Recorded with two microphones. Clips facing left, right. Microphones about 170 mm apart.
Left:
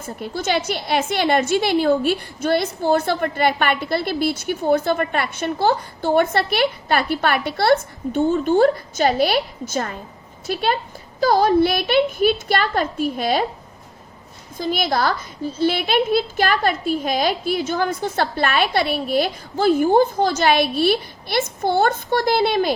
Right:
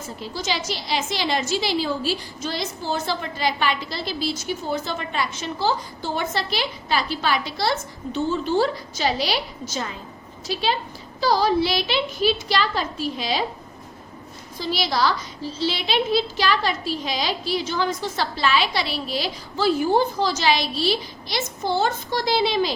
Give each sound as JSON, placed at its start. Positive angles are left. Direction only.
{"t": 0.2, "sound": "a woman's voice", "side_deg": 55}
{"t": 14.6, "sound": "a woman's voice", "side_deg": 55}